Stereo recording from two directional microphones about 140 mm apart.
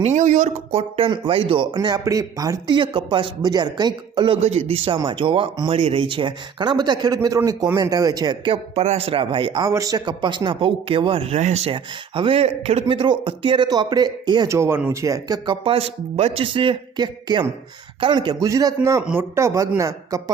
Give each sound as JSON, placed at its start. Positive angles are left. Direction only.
{"t": 0.0, "sound": "speech", "side_deg": -60}
{"t": 1.7, "sound": "speech", "side_deg": -30}
{"t": 4.4, "sound": "speech", "side_deg": -45}
{"t": 4.9, "sound": "speech", "side_deg": -35}
{"t": 8.7, "sound": "speech", "side_deg": -50}
{"t": 9.6, "sound": "speech", "side_deg": -25}
{"t": 13.0, "sound": "speech", "side_deg": -35}
{"t": 18.4, "sound": "speech", "side_deg": -20}